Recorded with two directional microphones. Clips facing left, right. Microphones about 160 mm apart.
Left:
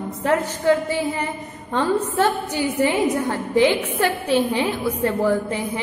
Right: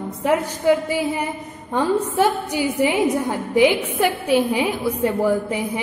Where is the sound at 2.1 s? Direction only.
10° right (ahead or behind).